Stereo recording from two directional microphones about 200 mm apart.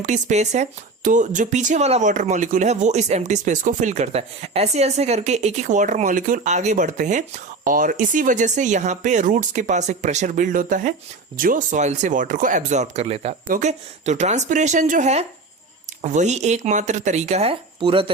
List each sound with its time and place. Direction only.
0.0 s speech: 35° right (ahead or behind)